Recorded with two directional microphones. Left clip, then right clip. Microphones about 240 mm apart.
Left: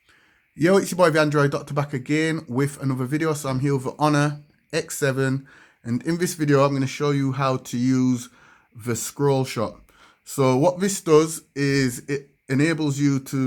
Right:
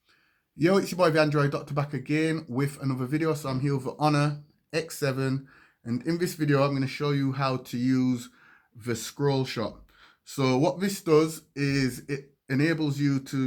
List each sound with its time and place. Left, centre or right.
0.6 s speech: left